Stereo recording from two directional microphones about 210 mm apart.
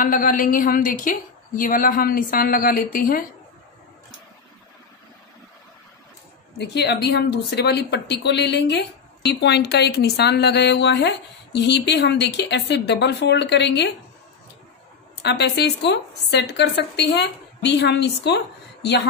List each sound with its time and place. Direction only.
0.0 s a woman's voice: 40° left (ahead or behind)
6.6 s a woman's voice: 55° left (ahead or behind)
15.2 s a woman's voice: 55° left (ahead or behind)